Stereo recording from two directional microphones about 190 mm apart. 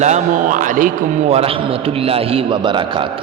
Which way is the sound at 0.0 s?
40° right (ahead or behind).